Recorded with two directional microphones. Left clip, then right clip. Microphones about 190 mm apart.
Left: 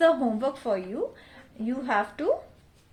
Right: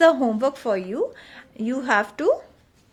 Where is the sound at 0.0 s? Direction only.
45° right (ahead or behind).